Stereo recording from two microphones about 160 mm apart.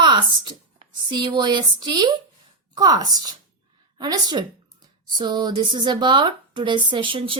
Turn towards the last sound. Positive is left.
turn(degrees=-35)  # may be behind; listen again after turning